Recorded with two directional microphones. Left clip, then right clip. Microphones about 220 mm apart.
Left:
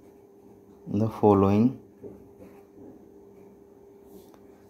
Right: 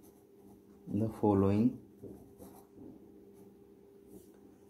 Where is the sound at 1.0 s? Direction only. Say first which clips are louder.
Left 10 dB; 25° left (ahead or behind).